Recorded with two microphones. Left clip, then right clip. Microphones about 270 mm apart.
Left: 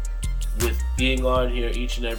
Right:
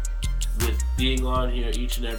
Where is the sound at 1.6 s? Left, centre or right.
Centre.